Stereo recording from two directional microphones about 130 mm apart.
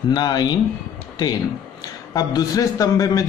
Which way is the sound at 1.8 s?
30° left (ahead or behind).